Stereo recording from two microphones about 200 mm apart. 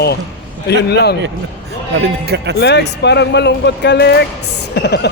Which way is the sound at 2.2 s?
55° right (ahead or behind).